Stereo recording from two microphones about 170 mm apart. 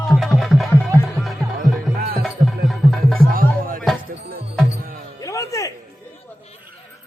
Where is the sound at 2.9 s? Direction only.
Centre (ahead or behind).